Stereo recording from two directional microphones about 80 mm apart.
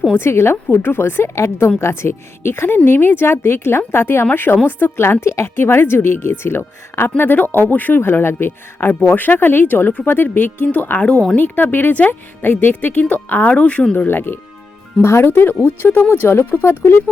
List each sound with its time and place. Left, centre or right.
0.1 s speech: left